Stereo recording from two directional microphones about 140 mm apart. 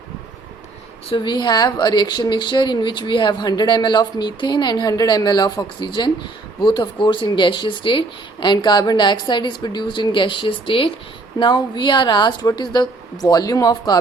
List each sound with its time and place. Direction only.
1.1 s a woman's voice: 30° left (ahead or behind)